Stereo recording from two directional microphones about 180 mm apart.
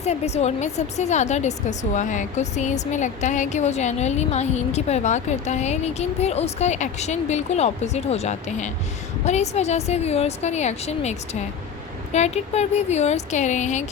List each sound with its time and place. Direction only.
0.0 s a woman's voice: 35° left (ahead or behind)